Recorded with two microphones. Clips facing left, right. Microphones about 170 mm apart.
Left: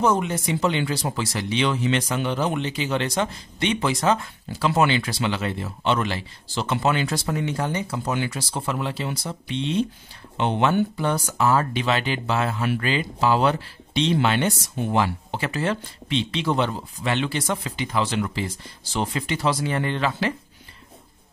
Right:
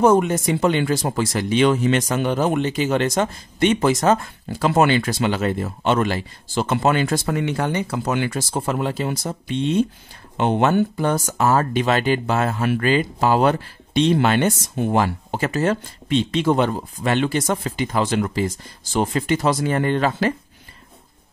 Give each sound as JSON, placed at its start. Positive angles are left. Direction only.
{"t": 0.0, "sound": "speech", "side_deg": -50}
{"t": 8.3, "sound": "speech", "side_deg": -45}